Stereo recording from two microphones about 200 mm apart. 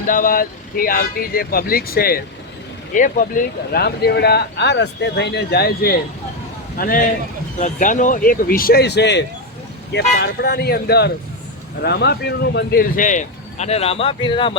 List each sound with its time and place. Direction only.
0.1 s speech: 45° left (ahead or behind); by 14.5 s 25° left (ahead or behind)